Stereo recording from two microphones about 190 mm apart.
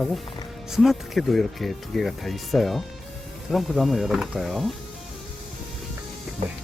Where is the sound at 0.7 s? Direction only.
Centre (ahead or behind).